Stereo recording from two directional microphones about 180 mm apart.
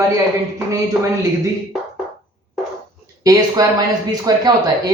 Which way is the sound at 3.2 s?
20° right (ahead or behind).